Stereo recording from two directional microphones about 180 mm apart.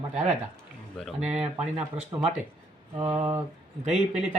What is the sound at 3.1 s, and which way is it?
Speech, 10° right (ahead or behind).